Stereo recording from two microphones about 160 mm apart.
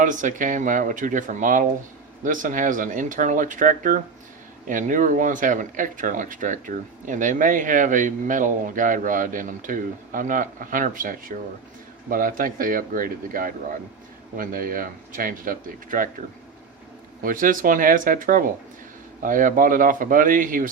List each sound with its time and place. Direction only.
0.0 s speech: 55° right (ahead or behind)
17.2 s speech: 60° right (ahead or behind)